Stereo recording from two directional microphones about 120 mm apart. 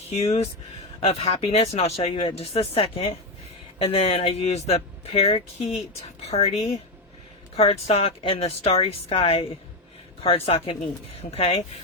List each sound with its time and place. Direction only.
0.2 s speech: 60° left (ahead or behind)